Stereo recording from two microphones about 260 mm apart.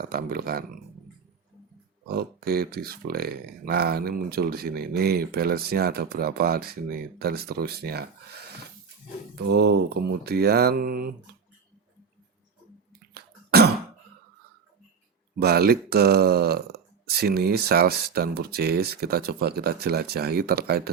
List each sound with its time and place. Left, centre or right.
0.0 s speech: right
2.0 s speech: right
9.5 s speech: right
13.1 s cough: right
15.4 s speech: right